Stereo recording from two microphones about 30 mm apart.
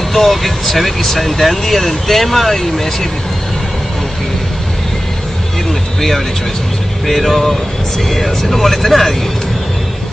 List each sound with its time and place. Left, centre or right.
0.1 s speech: centre
5.7 s music: centre
7.1 s speech: centre